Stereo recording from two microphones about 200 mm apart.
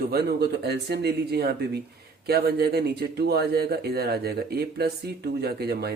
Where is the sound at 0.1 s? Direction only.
55° right (ahead or behind).